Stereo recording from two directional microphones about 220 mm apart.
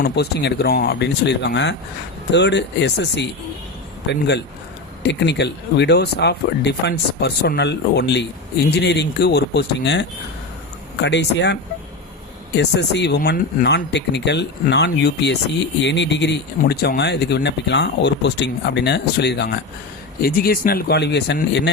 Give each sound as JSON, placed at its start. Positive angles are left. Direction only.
{"t": 0.0, "sound": "speech", "side_deg": 45}
{"t": 12.5, "sound": "speech", "side_deg": 50}